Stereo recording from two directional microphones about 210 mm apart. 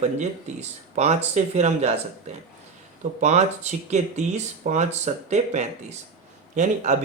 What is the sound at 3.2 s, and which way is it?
Speech, 35° right (ahead or behind).